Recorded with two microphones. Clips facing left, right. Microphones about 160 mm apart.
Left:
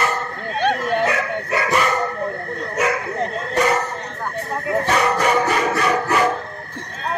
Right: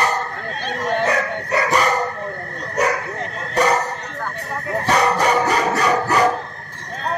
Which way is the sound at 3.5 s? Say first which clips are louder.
Right 2 dB; 40° right (ahead or behind).